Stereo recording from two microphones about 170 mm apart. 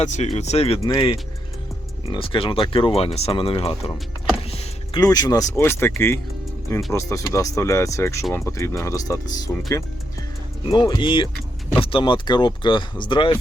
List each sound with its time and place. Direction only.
0.0 s speech: 45° left (ahead or behind)
0.9 s speech: 25° left (ahead or behind)
4.9 s speech: 20° left (ahead or behind)
9.5 s speech: 5° left (ahead or behind)
10.7 s speech: 25° left (ahead or behind)